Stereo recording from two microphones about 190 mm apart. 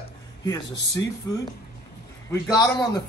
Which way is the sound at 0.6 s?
65° left (ahead or behind).